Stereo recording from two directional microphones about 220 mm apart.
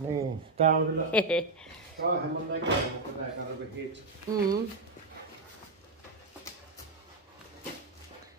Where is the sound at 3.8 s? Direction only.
55° right (ahead or behind).